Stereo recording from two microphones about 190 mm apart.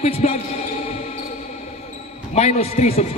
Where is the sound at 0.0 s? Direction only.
30° left (ahead or behind).